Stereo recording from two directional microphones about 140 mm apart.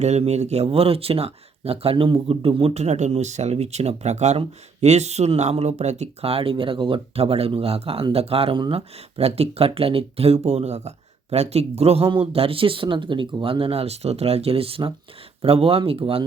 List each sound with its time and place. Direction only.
0.0 s speech: 50° right (ahead or behind)